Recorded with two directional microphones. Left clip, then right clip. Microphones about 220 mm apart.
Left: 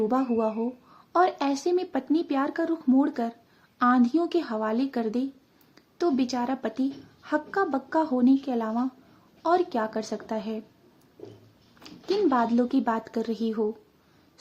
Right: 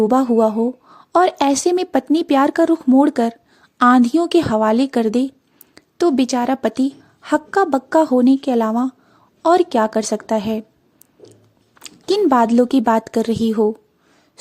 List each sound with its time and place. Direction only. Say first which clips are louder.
0.1 s a woman's voice: right 11 dB; 40° right (ahead or behind)
11.8 s a woman's voice: right 9 dB; 45° right (ahead or behind)